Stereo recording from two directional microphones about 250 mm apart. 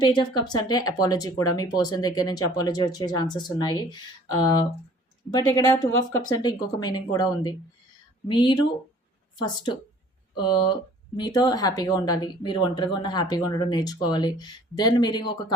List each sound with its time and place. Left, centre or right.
0.0 s speech: centre
10.3 s speech: centre